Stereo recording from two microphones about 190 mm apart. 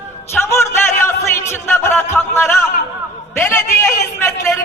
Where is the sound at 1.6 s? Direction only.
10° left (ahead or behind).